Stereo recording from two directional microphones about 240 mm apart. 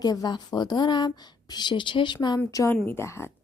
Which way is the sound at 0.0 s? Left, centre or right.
Centre.